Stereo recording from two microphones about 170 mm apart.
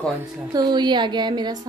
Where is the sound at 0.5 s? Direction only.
25° right (ahead or behind).